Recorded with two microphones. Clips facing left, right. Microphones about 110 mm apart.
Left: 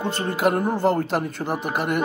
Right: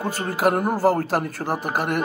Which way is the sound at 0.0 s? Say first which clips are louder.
Even; 5° right (ahead or behind).